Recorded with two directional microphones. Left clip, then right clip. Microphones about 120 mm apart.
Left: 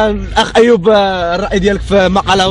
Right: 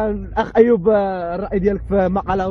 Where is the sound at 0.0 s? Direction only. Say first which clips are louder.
Left 9 dB; 15° right (ahead or behind).